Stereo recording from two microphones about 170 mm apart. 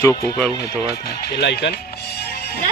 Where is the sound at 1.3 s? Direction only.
80° left.